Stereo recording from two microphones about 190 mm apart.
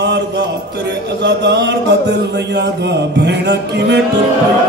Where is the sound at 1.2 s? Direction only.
65° right (ahead or behind).